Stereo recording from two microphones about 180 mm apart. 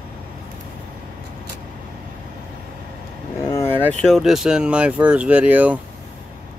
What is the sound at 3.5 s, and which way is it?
Vehicle, 15° left (ahead or behind).